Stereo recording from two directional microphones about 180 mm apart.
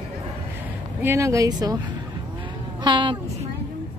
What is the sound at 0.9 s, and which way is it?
Speech, 15° right (ahead or behind).